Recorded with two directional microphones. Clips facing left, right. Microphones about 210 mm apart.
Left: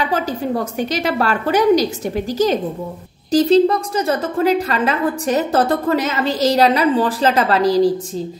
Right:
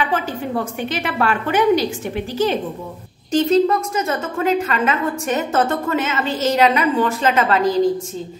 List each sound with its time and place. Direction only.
0.0 s a woman's voice: 40° left (ahead or behind)